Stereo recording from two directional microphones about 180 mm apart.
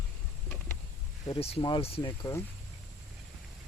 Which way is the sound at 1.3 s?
35° left (ahead or behind).